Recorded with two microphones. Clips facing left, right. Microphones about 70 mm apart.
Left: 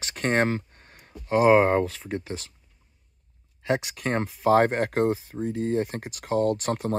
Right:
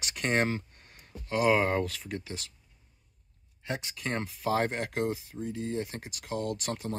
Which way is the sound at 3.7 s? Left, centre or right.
Left.